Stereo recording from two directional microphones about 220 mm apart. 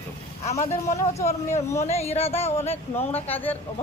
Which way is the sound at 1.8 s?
30° left (ahead or behind).